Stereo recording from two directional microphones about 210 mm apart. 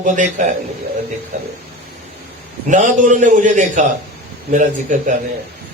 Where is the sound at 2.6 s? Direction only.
35° right (ahead or behind).